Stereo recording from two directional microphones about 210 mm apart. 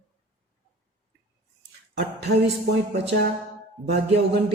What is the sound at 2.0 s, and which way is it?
Speech, 50° right (ahead or behind).